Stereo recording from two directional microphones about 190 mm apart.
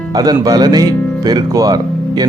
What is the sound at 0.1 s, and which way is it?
Speech, 20° right (ahead or behind).